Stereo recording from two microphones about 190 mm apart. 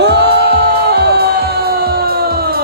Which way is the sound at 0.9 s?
60° right (ahead or behind).